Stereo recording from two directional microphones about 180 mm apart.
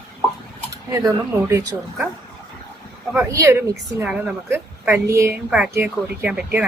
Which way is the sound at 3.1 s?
10° right (ahead or behind).